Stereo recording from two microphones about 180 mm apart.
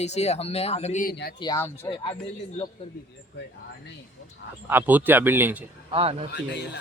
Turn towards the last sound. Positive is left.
turn(degrees=70)  # may be behind; listen again after turning